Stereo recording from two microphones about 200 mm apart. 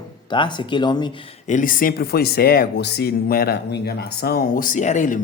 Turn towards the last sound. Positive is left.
turn(degrees=40)  # may be behind; listen again after turning